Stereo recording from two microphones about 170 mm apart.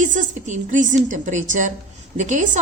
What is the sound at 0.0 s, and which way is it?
A woman's voice, 50° right (ahead or behind).